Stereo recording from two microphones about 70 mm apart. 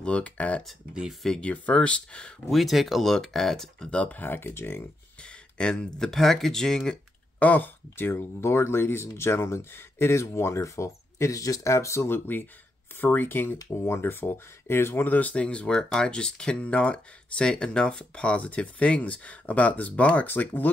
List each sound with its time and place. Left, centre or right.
0.0 s speech: centre
2.5 s speech: centre
3.9 s speech: left
5.2 s speech: centre
7.3 s speech: left